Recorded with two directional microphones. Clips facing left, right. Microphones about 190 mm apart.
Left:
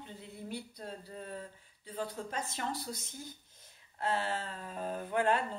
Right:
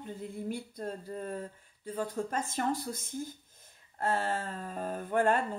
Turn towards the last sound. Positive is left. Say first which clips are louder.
# right 3 dB
turn(degrees=-45)  # may be behind; listen again after turning